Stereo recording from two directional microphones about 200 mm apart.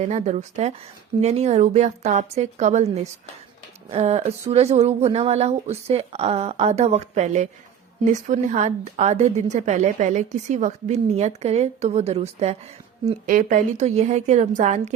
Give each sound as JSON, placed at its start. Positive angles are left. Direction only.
{"t": 0.0, "sound": "a woman's voice", "side_deg": -35}